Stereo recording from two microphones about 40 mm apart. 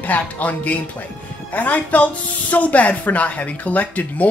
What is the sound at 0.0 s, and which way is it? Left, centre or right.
Speech, left.